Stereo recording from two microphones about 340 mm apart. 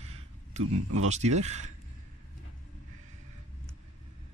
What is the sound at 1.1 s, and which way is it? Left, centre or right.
Speech, centre.